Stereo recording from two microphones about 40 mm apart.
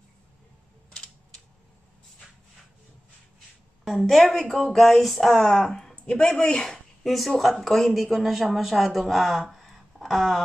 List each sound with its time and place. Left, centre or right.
4.0 s speech: centre
5.3 s speech: centre
7.1 s speech: centre
9.5 s a sound: centre